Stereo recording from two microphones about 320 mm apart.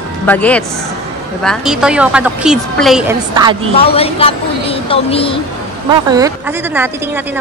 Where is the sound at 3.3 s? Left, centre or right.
Centre.